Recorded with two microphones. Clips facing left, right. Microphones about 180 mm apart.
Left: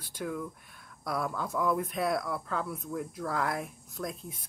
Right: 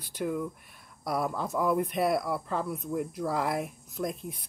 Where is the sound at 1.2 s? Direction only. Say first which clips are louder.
Right 2 dB; 20° right (ahead or behind).